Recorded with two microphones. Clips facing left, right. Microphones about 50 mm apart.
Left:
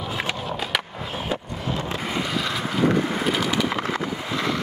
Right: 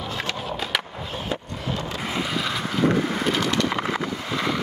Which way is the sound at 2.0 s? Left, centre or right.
Centre.